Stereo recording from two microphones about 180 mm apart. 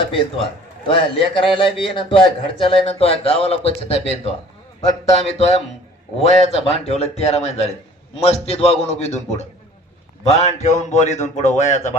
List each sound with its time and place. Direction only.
0.9 s a man's voice: 30° left (ahead or behind)